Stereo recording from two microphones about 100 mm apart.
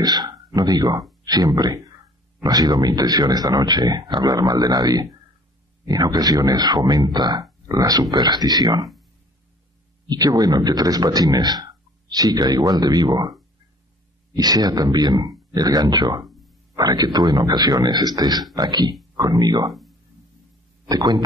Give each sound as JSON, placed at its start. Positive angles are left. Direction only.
{"t": 0.0, "sound": "a man's voice", "side_deg": -40}
{"t": 10.0, "sound": "a man's voice", "side_deg": -40}
{"t": 14.3, "sound": "a man's voice", "side_deg": -40}
{"t": 16.3, "sound": "a sound", "side_deg": 0}
{"t": 16.7, "sound": "a man's voice", "side_deg": -40}
{"t": 20.9, "sound": "a man's voice", "side_deg": -40}